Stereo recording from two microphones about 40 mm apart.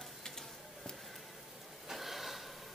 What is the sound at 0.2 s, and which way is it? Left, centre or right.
Stir, centre.